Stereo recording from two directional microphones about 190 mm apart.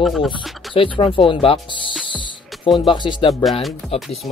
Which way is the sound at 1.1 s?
30° left (ahead or behind).